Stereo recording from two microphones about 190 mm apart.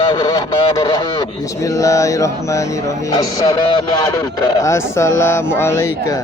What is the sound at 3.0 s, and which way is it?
Honk, 20° left (ahead or behind).